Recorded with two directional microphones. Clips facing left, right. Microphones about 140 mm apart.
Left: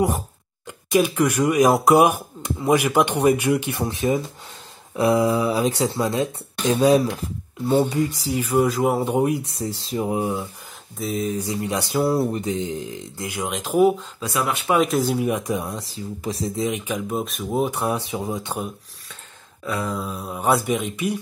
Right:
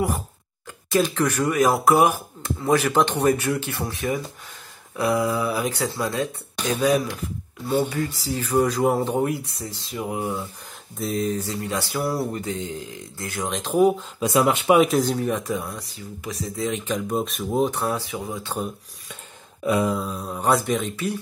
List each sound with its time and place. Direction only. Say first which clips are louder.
0.7 s speech: left 2 dB; 15° left (ahead or behind)
7.9 s speech: left 4 dB; 15° left (ahead or behind)
9.1 s speech: left 3 dB; 20° left (ahead or behind)
9.6 s speech: left 6 dB; 30° left (ahead or behind)
11.0 s speech: even; centre (ahead or behind)
11.3 s speech: left 2 dB; 15° left (ahead or behind)
14.2 s speech: right 5 dB; 20° right (ahead or behind)
14.8 s speech: right 1 dB; centre (ahead or behind); by 16.6 s 30° left (ahead or behind)
16.6 s speech: right 3 dB; 10° left (ahead or behind)
19.6 s a sound: right 6 dB; 20° right (ahead or behind)
19.9 s speech: right 2 dB; 5° left (ahead or behind)